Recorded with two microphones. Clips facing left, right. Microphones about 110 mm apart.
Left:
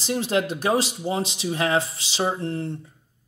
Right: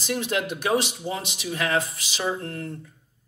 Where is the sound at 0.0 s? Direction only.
30° left (ahead or behind).